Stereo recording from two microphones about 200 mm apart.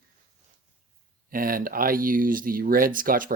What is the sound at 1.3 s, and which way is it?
Speech, 45° right (ahead or behind).